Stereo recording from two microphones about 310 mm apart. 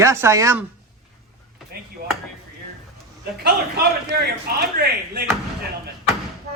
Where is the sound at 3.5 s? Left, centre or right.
Right.